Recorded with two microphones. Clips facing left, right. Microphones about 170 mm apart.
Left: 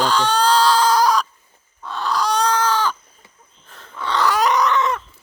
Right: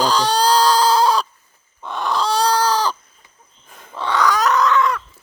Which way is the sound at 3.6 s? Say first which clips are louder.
Even; 10° right (ahead or behind).